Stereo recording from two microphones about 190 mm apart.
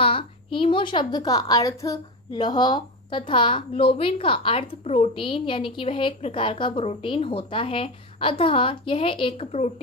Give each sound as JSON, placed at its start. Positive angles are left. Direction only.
{"t": 0.0, "sound": "a woman's voice", "side_deg": 30}